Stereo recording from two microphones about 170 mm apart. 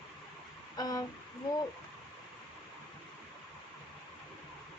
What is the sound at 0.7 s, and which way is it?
Speech, 20° left (ahead or behind).